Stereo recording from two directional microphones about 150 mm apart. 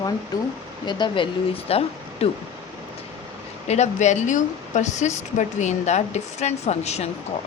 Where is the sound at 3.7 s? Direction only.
50° left (ahead or behind).